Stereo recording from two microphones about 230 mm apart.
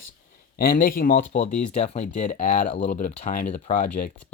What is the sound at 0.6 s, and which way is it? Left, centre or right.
Speech, left.